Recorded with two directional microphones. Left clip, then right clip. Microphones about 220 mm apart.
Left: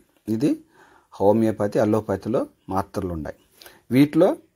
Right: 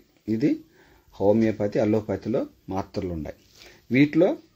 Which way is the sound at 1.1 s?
15° left (ahead or behind).